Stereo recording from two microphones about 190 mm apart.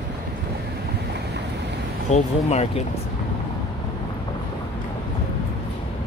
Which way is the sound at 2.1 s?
35° left (ahead or behind).